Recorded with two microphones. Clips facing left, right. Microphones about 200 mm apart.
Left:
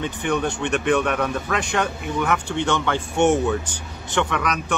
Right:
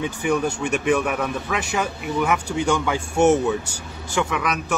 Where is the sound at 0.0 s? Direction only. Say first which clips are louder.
Right 1 dB; 10° right (ahead or behind).